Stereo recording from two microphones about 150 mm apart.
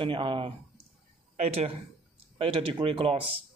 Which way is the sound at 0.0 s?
35° right (ahead or behind).